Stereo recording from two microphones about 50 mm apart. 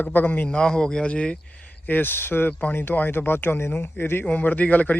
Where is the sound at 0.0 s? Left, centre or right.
Left.